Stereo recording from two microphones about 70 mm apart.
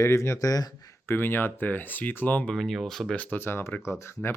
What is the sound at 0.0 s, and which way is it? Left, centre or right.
Speech, left.